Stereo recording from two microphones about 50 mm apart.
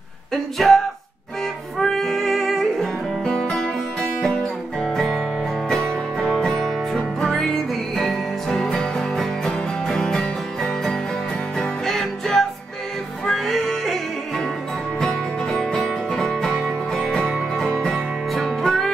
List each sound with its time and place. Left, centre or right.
0.3 s a sound: centre
1.8 s music: centre
3.3 s music: centre
4.8 s music: centre